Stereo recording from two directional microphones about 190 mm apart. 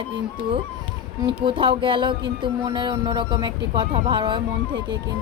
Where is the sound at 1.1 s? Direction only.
25° right (ahead or behind).